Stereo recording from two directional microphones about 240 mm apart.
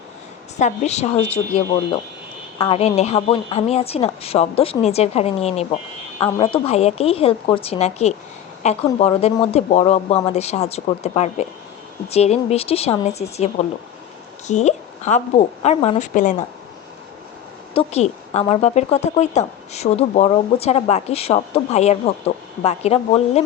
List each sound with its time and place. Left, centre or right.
0.6 s speech: left
17.7 s speech: left